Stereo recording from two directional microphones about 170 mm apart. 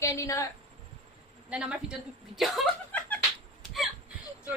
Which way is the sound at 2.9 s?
10° left (ahead or behind).